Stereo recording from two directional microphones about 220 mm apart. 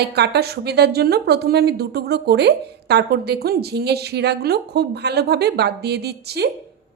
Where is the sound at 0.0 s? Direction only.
50° right (ahead or behind).